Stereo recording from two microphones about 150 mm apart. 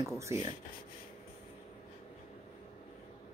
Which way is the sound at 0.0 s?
20° right (ahead or behind).